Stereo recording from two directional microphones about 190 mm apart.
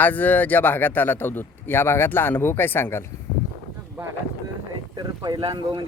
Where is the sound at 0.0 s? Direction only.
10° left (ahead or behind).